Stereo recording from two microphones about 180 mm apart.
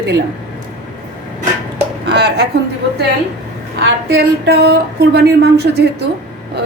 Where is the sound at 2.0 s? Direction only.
70° right (ahead or behind).